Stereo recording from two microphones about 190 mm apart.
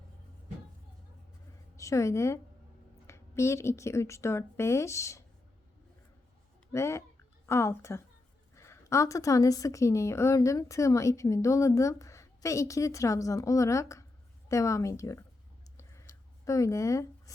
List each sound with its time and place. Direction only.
1.7 s a woman's voice: 15° left (ahead or behind)
6.7 s a woman's voice: 15° left (ahead or behind)
15.8 s a sound: 15° left (ahead or behind)